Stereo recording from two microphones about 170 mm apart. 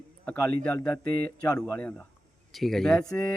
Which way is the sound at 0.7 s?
20° left (ahead or behind).